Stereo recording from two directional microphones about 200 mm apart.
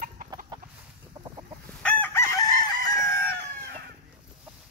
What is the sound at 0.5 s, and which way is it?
Chicken, 20° right (ahead or behind).